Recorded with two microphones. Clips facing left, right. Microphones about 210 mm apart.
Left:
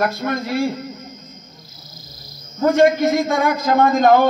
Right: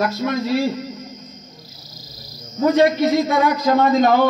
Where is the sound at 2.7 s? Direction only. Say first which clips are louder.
Left 1 dB; 50° left (ahead or behind).